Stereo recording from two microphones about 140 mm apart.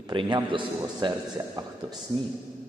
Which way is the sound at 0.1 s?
35° right (ahead or behind).